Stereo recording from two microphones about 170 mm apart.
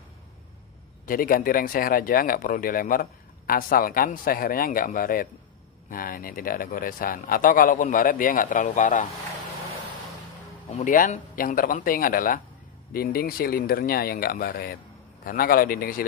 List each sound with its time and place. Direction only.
1.0 s speech: 55° left (ahead or behind)
10.7 s speech: 45° left (ahead or behind)